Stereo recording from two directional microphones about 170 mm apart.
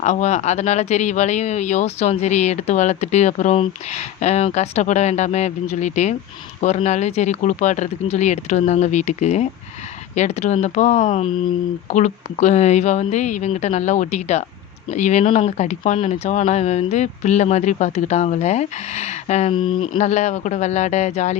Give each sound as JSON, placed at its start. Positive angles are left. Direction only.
{"t": 0.0, "sound": "speech", "side_deg": 45}
{"t": 19.5, "sound": "a sound", "side_deg": 30}
{"t": 20.0, "sound": "speech", "side_deg": 45}